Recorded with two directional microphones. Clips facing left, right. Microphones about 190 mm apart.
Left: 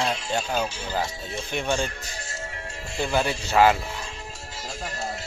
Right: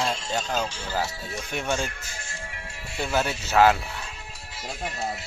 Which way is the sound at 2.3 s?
40° left (ahead or behind).